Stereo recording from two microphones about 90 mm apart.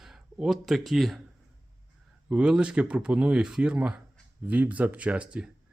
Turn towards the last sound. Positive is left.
turn(degrees=-10)  # may be behind; listen again after turning